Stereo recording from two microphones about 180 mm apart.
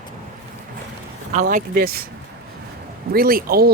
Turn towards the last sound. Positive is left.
turn(degrees=-55)  # may be behind; listen again after turning